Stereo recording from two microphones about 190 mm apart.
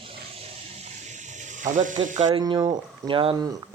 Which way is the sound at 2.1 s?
40° right (ahead or behind).